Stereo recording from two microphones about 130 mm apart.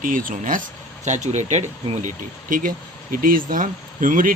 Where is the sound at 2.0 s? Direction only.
90° right.